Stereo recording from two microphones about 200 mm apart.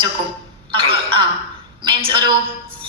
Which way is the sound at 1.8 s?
25° right (ahead or behind).